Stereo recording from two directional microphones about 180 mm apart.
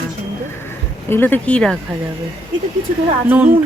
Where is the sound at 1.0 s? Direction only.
10° left (ahead or behind).